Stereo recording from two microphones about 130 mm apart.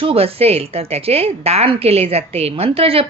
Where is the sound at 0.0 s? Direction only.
45° right (ahead or behind).